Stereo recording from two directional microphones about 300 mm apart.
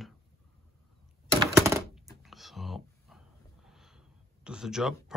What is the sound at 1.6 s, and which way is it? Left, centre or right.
Typewriter, centre.